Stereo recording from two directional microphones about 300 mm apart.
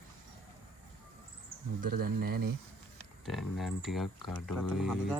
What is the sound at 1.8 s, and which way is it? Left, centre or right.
Speech, right.